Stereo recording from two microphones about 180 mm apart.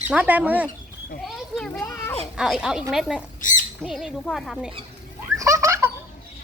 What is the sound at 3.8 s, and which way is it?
Speech, centre (ahead or behind).